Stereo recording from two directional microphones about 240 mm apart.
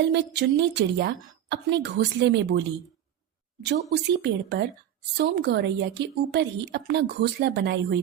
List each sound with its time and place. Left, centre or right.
0.1 s a woman's voice: right